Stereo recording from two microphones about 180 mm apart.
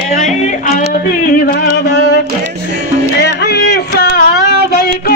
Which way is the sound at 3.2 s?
65° left (ahead or behind).